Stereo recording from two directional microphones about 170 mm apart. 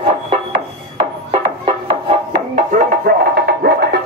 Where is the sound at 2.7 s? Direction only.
55° right (ahead or behind).